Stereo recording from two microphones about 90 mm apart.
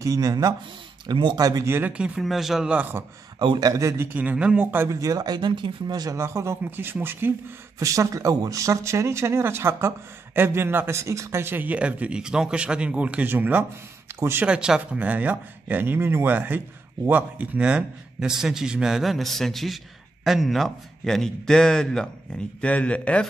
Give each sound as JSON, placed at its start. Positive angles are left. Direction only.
{"t": 0.0, "sound": "speech", "side_deg": -40}
{"t": 1.0, "sound": "speech", "side_deg": -60}
{"t": 1.6, "sound": "speech", "side_deg": -25}
{"t": 1.9, "sound": "speech", "side_deg": -15}
{"t": 3.3, "sound": "speech", "side_deg": -50}
{"t": 4.1, "sound": "speech", "side_deg": -15}
{"t": 4.8, "sound": "speech", "side_deg": -40}
{"t": 6.1, "sound": "speech", "side_deg": -30}
{"t": 7.8, "sound": "speech", "side_deg": -35}
{"t": 14.4, "sound": "a man's voice", "side_deg": -10}